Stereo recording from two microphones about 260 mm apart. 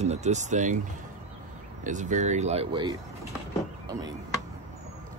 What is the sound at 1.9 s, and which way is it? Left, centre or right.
Speech, right.